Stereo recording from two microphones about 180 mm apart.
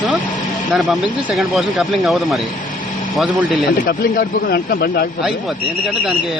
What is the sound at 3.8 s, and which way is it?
Speech, 60° left (ahead or behind).